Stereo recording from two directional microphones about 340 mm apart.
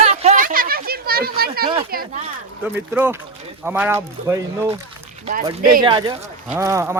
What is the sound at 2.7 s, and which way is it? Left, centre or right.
Speech, centre.